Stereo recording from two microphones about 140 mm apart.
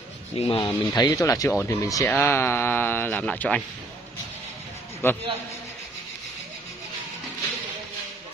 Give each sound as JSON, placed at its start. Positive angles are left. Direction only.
{"t": 0.4, "sound": "speech", "side_deg": 40}
{"t": 0.7, "sound": "speech", "side_deg": 25}
{"t": 5.0, "sound": "speech", "side_deg": 15}